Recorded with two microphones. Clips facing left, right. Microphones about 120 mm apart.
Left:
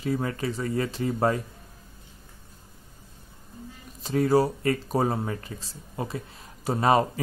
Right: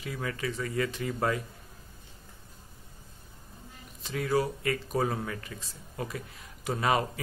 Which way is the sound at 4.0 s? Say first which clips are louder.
Left 7 dB; 35° left (ahead or behind).